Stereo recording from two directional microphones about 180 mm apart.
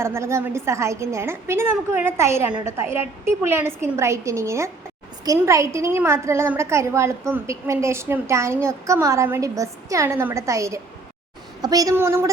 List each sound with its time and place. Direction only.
0.0 s a woman's voice: 15° right (ahead or behind)